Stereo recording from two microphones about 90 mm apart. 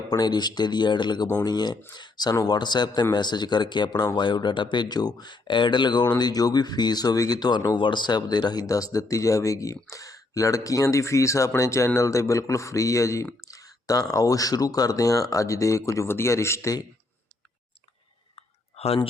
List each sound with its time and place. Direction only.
0.1 s speech: 50° left (ahead or behind)
2.3 s speech: 40° left (ahead or behind)
2.6 s speech: 55° left (ahead or behind)
7.8 s speech: 60° left (ahead or behind); by 16.7 s 30° left (ahead or behind)
18.3 s clicking: 90° left